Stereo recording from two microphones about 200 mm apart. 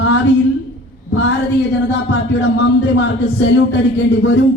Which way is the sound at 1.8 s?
60° left (ahead or behind).